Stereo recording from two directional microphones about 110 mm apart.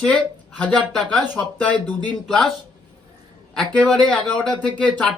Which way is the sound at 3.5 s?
10° left (ahead or behind).